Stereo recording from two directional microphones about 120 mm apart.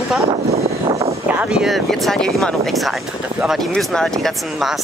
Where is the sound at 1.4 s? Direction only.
5° right (ahead or behind).